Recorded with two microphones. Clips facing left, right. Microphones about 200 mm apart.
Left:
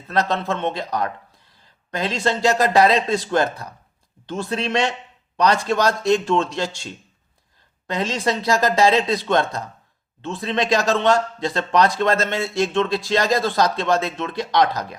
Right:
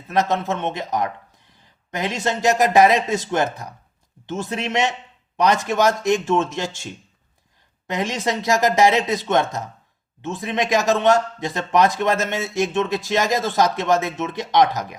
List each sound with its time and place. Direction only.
0.1 s speech: 15° right (ahead or behind)
7.9 s speech: 15° right (ahead or behind)